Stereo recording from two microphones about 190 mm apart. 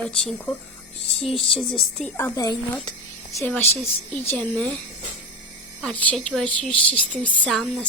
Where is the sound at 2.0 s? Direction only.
10° left (ahead or behind).